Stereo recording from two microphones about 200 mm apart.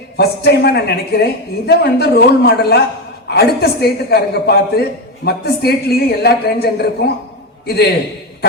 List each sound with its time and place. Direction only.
0.2 s a woman's voice: 55° left (ahead or behind)